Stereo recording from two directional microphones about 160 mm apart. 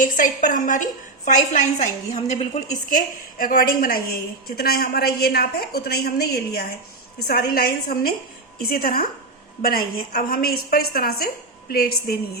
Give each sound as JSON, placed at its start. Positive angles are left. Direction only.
{"t": 0.0, "sound": "a woman's voice", "side_deg": 55}